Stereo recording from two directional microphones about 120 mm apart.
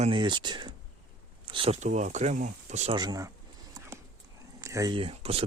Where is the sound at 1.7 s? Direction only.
75° right (ahead or behind).